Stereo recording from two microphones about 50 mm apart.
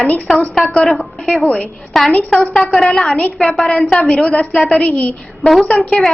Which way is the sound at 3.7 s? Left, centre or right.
Centre.